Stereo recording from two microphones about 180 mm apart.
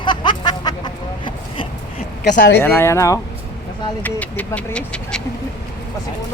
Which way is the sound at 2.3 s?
70° left (ahead or behind).